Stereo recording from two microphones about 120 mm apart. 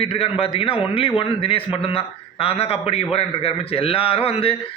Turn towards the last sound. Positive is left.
turn(degrees=55)  # may be behind; listen again after turning